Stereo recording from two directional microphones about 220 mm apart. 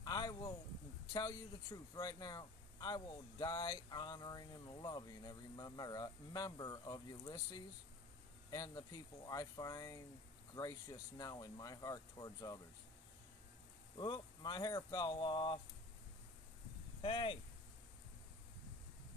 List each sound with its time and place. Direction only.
0.0 s a sound: 15° left (ahead or behind)
1.1 s speech: 15° left (ahead or behind)
13.9 s speech: 20° left (ahead or behind)
17.0 s speech: 25° left (ahead or behind)